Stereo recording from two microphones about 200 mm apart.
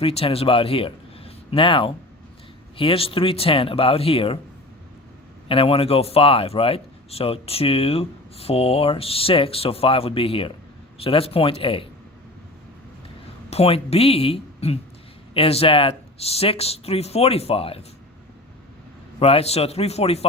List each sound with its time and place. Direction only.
0.0 s speech: 30° left (ahead or behind)
5.5 s speech: 30° left (ahead or behind)
13.5 s speech: 30° left (ahead or behind)
19.2 s a man's voice: 30° left (ahead or behind)